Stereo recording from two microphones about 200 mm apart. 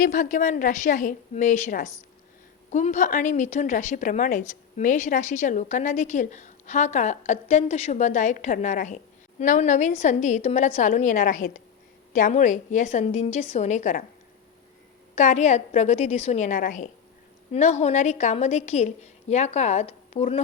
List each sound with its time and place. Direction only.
0.0 s a woman's voice: 40° left (ahead or behind)
15.1 s a woman's voice: 35° left (ahead or behind)